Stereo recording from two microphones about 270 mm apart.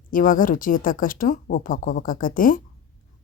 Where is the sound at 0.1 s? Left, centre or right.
Left.